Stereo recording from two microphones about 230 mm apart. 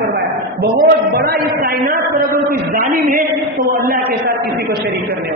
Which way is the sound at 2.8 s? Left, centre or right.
Right.